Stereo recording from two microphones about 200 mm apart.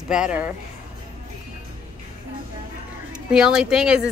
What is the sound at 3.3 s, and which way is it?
Speech, 5° right (ahead or behind).